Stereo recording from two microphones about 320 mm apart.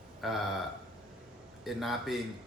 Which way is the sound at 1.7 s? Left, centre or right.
Centre.